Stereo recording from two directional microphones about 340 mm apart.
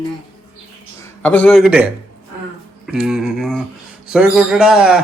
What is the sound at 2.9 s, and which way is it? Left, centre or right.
Speech, centre.